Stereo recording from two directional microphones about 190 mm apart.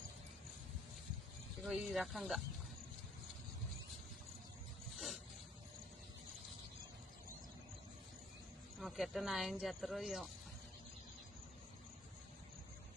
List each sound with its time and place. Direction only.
1.6 s speech: centre (ahead or behind)
8.8 s speech: centre (ahead or behind)